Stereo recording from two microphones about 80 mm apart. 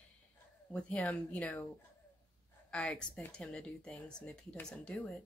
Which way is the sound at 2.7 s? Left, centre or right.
Centre.